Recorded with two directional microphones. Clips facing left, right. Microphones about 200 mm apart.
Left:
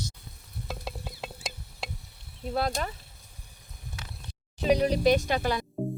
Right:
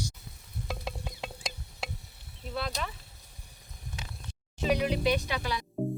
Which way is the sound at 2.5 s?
45° left (ahead or behind).